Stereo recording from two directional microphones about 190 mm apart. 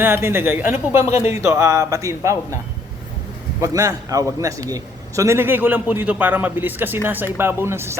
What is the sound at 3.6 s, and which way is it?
A man's voice, 15° right (ahead or behind).